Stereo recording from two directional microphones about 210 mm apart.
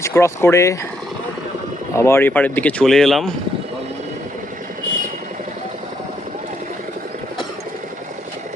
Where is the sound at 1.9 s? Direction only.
15° left (ahead or behind).